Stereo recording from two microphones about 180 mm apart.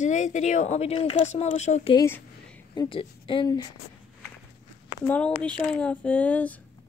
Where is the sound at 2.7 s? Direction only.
25° left (ahead or behind).